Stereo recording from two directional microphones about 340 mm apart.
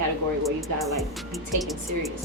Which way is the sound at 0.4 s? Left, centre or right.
Centre.